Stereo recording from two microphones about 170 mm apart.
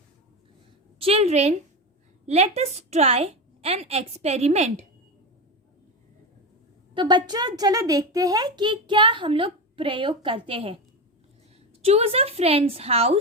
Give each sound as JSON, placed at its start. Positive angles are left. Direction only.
{"t": 0.9, "sound": "a woman's voice", "side_deg": -35}
{"t": 6.9, "sound": "a child's voice", "side_deg": -25}
{"t": 11.8, "sound": "a woman's voice", "side_deg": -40}